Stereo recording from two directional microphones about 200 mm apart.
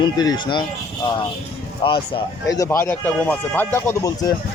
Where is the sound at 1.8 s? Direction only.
25° left (ahead or behind).